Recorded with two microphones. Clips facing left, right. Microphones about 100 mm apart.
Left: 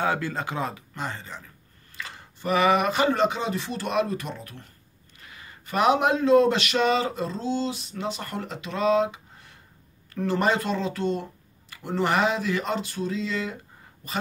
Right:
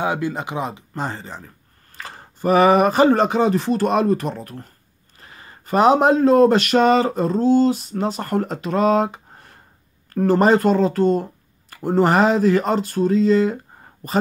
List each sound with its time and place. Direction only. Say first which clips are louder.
0.0 s speech: right 4 dB; 15° right (ahead or behind)
0.9 s speech: right 6 dB; 35° right (ahead or behind)